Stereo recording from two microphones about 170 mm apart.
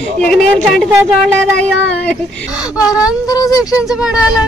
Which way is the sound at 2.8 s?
5° right (ahead or behind).